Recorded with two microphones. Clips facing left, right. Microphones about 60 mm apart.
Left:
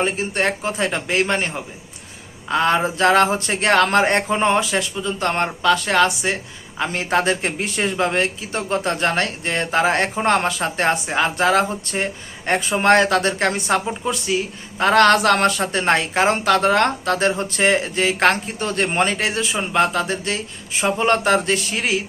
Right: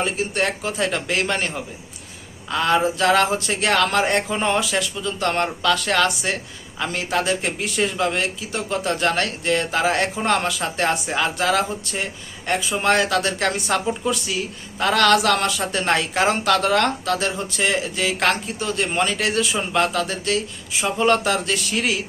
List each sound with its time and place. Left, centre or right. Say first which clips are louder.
0.0 s a woman's voice: left 2 dB; left